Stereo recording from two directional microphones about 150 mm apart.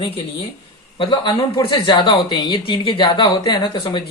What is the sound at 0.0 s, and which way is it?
Speech, 40° left (ahead or behind).